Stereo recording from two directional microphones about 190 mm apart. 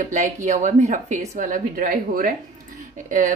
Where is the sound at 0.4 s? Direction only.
40° right (ahead or behind).